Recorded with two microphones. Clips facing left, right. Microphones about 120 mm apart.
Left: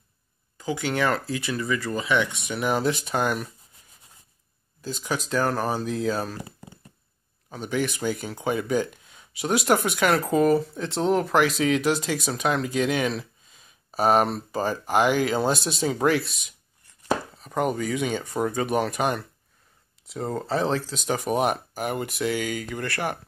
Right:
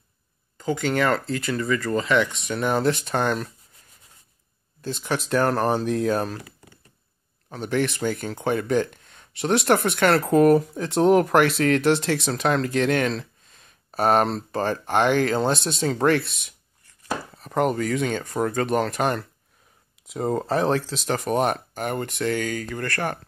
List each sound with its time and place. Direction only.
0.6 s speech: 5° left (ahead or behind)
4.8 s speech: centre (ahead or behind)
6.4 s a sound: 30° left (ahead or behind)
7.5 s speech: 5° left (ahead or behind)
20.1 s speech: 15° right (ahead or behind)
20.8 s speech: centre (ahead or behind)